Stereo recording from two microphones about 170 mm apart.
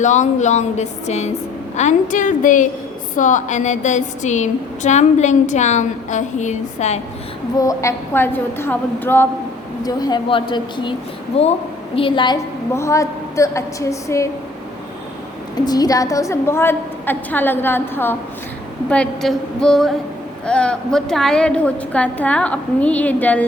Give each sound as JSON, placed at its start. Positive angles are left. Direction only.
{"t": 0.0, "sound": "a woman's voice", "side_deg": 45}
{"t": 7.5, "sound": "a woman's voice", "side_deg": 20}
{"t": 9.8, "sound": "a woman's voice", "side_deg": 25}
{"t": 12.7, "sound": "a woman's voice", "side_deg": 15}
{"t": 15.6, "sound": "a woman's voice", "side_deg": 20}